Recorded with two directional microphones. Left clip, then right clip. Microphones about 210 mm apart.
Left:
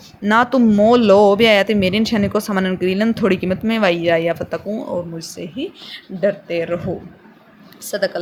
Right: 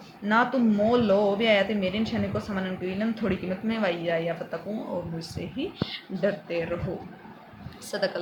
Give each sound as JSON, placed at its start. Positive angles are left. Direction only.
{"t": 0.2, "sound": "speech", "side_deg": 50}
{"t": 5.2, "sound": "speech", "side_deg": 35}
{"t": 6.5, "sound": "a man's voice", "side_deg": 40}
{"t": 7.9, "sound": "speech", "side_deg": 30}